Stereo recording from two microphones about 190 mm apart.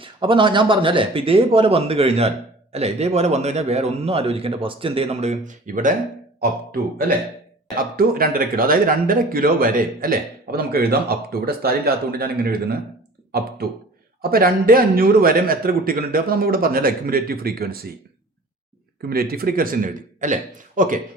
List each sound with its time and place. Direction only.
0.0 s a man's voice: 25° right (ahead or behind); by 5.9 s 45° right (ahead or behind)
7.8 s speech: 50° right (ahead or behind)
19.0 s speech: 50° right (ahead or behind)